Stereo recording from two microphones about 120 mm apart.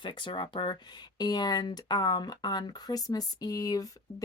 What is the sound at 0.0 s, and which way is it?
A woman's voice, 40° left (ahead or behind).